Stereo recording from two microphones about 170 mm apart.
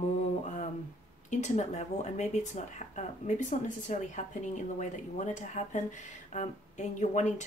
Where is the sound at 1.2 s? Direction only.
45° left (ahead or behind).